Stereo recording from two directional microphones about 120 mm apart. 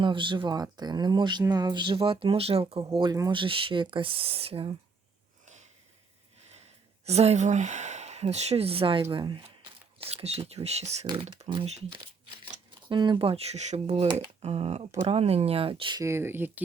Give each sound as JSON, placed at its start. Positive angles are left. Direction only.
{"t": 0.0, "sound": "speech", "side_deg": -40}
{"t": 7.0, "sound": "speech", "side_deg": -60}
{"t": 10.0, "sound": "speech", "side_deg": -55}
{"t": 16.0, "sound": "speech", "side_deg": -20}